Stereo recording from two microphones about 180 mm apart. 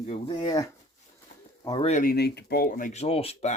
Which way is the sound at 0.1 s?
25° left (ahead or behind).